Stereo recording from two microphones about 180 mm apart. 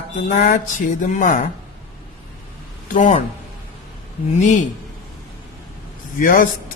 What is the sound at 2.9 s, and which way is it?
Speech, 40° left (ahead or behind).